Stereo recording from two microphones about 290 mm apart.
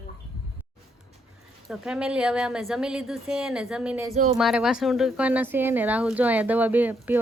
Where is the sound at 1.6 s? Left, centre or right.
Centre.